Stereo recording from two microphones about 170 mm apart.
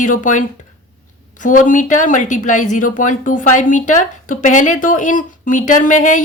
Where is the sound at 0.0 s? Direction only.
50° left (ahead or behind).